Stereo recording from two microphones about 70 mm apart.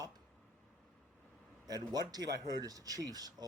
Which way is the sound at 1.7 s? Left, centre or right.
Right.